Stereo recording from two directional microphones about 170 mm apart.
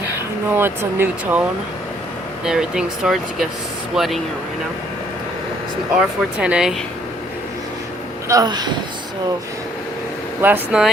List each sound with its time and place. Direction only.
0.5 s speech: 15° right (ahead or behind)
6.0 s speech: 5° right (ahead or behind)
8.3 s speech: 20° right (ahead or behind)
10.4 s speech: 10° right (ahead or behind)